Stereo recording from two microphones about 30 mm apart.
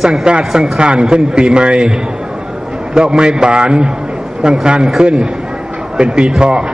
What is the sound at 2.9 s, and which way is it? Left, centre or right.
A man's voice, right.